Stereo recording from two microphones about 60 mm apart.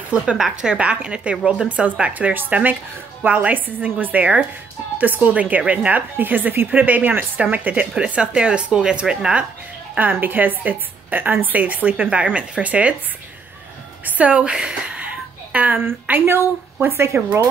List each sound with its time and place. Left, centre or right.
0.6 s speech: centre
9.9 s a woman's voice: right
14.0 s a sound: right
15.8 s a woman's voice: right